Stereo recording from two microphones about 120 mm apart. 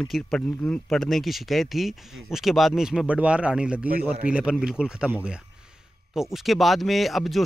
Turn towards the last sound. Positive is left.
turn(degrees=0)  # may be behind; listen again after turning